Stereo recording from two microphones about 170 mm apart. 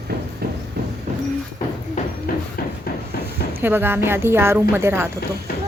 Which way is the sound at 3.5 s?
10° right (ahead or behind).